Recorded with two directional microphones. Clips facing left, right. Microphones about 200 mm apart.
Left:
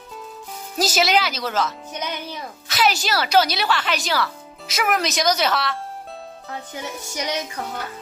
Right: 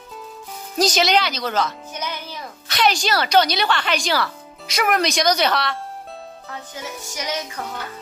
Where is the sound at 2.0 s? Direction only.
20° left (ahead or behind).